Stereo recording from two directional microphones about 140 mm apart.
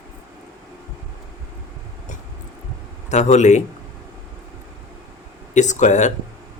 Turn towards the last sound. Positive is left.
turn(degrees=60)  # may be behind; listen again after turning